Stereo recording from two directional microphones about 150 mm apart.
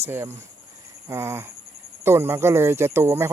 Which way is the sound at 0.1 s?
15° right (ahead or behind).